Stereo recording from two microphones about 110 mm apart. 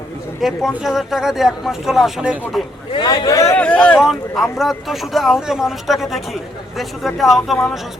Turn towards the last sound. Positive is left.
turn(degrees=0)  # may be behind; listen again after turning